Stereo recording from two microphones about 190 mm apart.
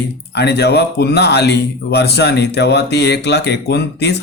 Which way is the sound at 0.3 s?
60° left (ahead or behind).